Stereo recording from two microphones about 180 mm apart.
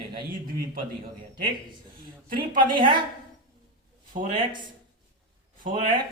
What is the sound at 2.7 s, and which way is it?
Speech, 25° right (ahead or behind).